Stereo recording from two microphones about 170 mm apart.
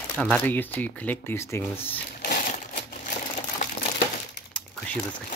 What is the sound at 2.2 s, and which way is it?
Crushing, 55° left (ahead or behind).